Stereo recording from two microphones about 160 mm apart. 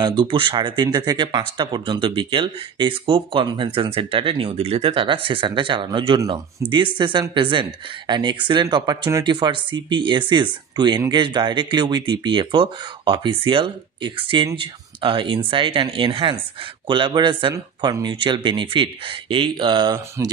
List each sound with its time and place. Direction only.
0.0 s speech: 30° right (ahead or behind)